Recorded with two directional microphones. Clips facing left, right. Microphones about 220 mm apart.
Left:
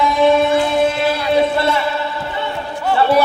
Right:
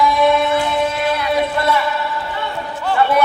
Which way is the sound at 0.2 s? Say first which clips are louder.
Left 2 dB; 30° left (ahead or behind).